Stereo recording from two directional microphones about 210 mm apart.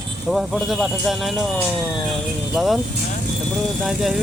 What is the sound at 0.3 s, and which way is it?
Speech, centre (ahead or behind).